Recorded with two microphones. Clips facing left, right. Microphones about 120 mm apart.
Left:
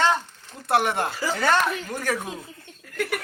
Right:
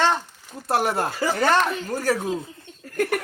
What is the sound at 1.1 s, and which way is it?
Speech, 60° right (ahead or behind).